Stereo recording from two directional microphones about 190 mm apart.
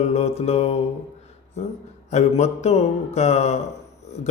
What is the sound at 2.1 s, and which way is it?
A man's voice, 35° left (ahead or behind).